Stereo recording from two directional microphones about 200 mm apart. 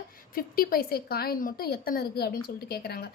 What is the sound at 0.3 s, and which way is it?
A woman's voice, 45° left (ahead or behind).